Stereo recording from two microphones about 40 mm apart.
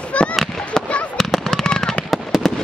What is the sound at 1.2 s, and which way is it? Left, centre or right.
Machine gun, centre.